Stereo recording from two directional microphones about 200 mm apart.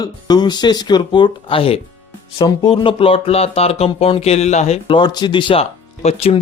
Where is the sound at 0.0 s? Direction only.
20° left (ahead or behind).